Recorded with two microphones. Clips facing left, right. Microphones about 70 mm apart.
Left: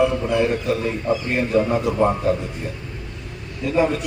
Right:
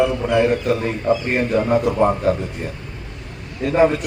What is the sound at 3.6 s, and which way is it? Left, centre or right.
Speech, right.